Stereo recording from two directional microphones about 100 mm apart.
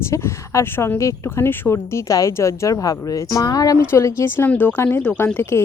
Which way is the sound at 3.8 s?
25° left (ahead or behind).